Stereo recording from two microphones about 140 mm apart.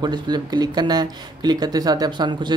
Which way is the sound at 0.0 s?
30° right (ahead or behind).